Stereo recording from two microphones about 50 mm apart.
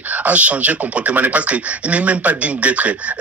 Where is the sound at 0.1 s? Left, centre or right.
Right.